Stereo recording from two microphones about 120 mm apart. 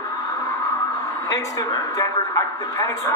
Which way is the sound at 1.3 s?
25° left (ahead or behind).